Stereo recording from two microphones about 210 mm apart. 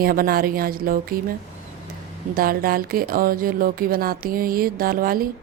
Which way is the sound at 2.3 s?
45° right (ahead or behind).